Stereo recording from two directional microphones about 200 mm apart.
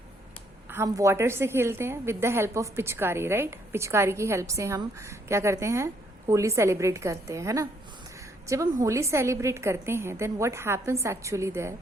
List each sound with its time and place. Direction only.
0.7 s a woman's voice: 15° right (ahead or behind)